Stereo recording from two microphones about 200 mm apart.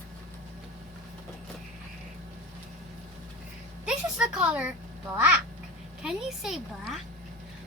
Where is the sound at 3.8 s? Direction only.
5° right (ahead or behind).